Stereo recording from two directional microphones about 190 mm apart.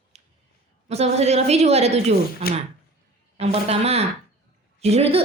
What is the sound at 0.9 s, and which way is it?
A woman's voice, 35° right (ahead or behind).